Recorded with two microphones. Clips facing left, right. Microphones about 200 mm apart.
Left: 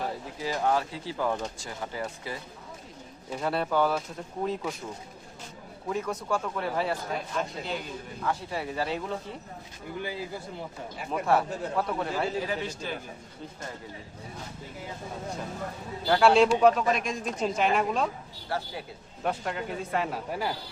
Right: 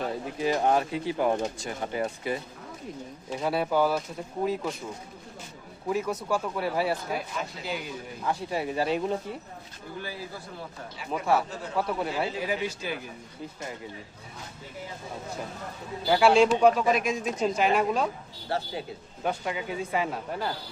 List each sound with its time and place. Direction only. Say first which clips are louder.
0.3 s speech: right 3 dB; 20° right (ahead or behind)
3.3 s speech: right 1 dB; 5° right (ahead or behind)
5.9 s speech: right 2 dB; 5° right (ahead or behind)
10.0 s speech: left 3 dB; 20° left (ahead or behind)
11.1 s speech: even; centre (ahead or behind)
16.0 s speech: even; 5° right (ahead or behind)
18.4 s speech: right 3 dB; 25° right (ahead or behind)
19.2 s speech: even; centre (ahead or behind)